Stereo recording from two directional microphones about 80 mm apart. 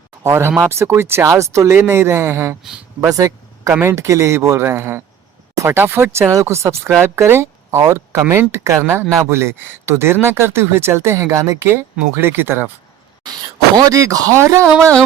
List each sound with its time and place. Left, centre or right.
0.2 s speech: right
3.2 s a sound: right
3.8 s speech: right
13.7 s speech: right